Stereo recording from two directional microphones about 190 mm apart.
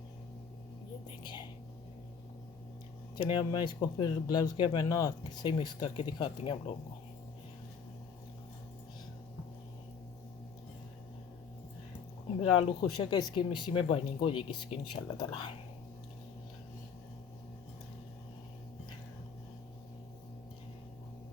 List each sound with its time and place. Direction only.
1.2 s speech: 25° left (ahead or behind)
3.2 s speech: 25° left (ahead or behind)
12.4 s speech: 25° left (ahead or behind)